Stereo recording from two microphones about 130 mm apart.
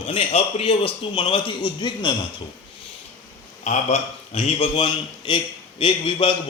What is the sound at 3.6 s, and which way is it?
A man's voice, 60° left (ahead or behind).